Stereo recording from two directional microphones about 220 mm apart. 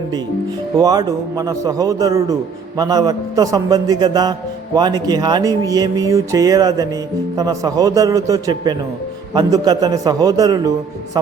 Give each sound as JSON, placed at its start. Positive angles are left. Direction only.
{"t": 0.8, "sound": "a man's voice", "side_deg": -15}